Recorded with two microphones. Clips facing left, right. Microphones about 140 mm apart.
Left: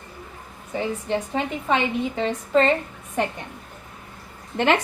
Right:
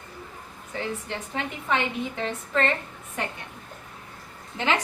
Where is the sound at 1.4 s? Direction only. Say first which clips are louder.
Left 1 dB; 15° left (ahead or behind).